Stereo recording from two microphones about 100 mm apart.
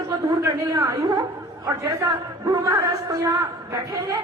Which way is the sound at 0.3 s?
30° right (ahead or behind).